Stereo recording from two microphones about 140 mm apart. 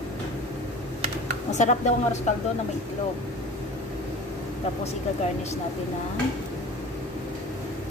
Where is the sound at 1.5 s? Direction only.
55° left (ahead or behind).